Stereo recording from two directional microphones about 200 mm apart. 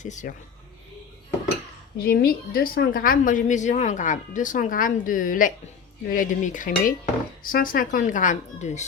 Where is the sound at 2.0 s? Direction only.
50° left (ahead or behind).